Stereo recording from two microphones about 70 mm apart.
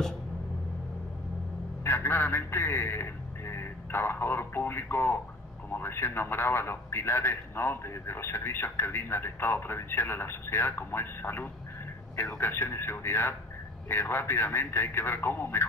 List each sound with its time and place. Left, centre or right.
1.9 s a man's voice: left